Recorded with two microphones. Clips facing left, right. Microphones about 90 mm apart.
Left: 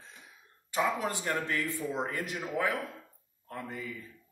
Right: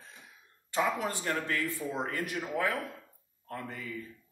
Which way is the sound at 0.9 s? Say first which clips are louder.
Even; 15° left (ahead or behind).